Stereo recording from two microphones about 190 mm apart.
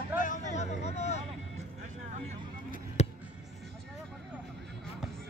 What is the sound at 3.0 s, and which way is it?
Music, 35° left (ahead or behind).